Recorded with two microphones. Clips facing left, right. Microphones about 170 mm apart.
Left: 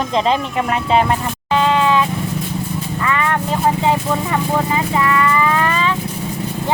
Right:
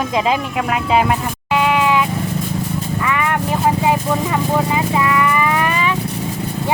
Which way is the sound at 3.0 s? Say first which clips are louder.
Left 1 dB; 15° right (ahead or behind).